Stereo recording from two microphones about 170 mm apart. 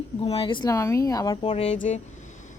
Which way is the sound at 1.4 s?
40° left (ahead or behind).